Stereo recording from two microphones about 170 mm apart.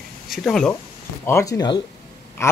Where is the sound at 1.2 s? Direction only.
15° left (ahead or behind).